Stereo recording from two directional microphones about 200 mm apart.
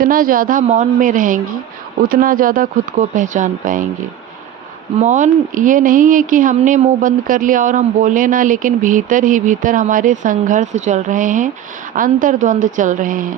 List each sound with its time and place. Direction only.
0.0 s speech: 45° right (ahead or behind)
4.9 s speech: 35° right (ahead or behind)